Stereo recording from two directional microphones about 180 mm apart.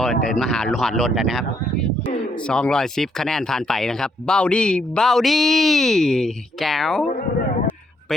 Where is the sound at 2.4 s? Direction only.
5° left (ahead or behind).